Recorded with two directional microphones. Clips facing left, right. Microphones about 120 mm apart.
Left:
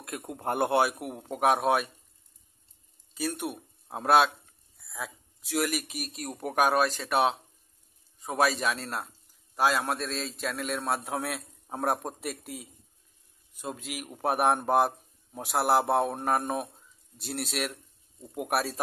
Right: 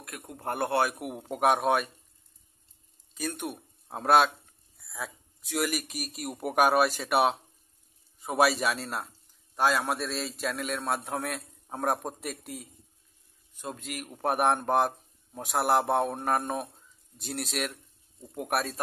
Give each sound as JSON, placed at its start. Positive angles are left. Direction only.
{"t": 0.0, "sound": "a man's voice", "side_deg": 20}
{"t": 0.8, "sound": "a man's voice", "side_deg": 0}
{"t": 3.2, "sound": "a man's voice", "side_deg": 0}